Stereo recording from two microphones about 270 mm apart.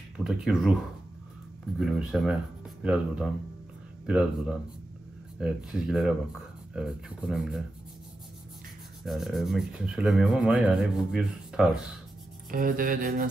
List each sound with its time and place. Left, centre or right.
0.2 s speech: centre
1.8 s speech: centre
9.0 s speech: centre
12.4 s speech: right